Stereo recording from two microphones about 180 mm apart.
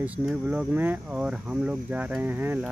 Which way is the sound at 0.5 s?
10° right (ahead or behind).